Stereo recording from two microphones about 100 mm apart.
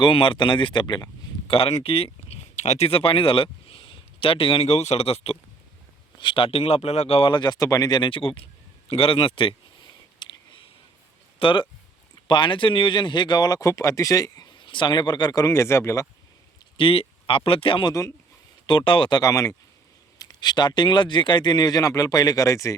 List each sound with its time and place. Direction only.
0.0 s speech: 60° left (ahead or behind)
1.5 s speech: 70° left (ahead or behind); by 5.4 s 90° left
6.1 s speech: 60° left (ahead or behind); by 7.3 s 90° left
7.3 s speech: 50° left (ahead or behind)
8.9 s clicking: 65° left (ahead or behind); by 10.6 s 50° left (ahead or behind)
11.3 s speech: 55° left (ahead or behind); by 16.0 s 30° left (ahead or behind)
16.7 s speech: 65° left (ahead or behind)
19.2 s speech: 35° left (ahead or behind)
20.1 s speech: 45° left (ahead or behind)